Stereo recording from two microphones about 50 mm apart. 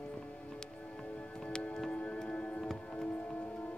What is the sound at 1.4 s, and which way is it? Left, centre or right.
Music, centre.